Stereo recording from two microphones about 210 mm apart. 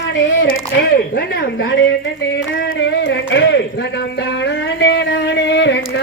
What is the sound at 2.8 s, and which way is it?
Speech, 55° left (ahead or behind).